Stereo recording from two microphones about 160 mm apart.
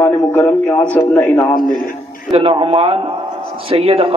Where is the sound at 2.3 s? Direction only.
35° right (ahead or behind).